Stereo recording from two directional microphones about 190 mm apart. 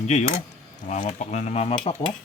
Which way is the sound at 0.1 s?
35° left (ahead or behind).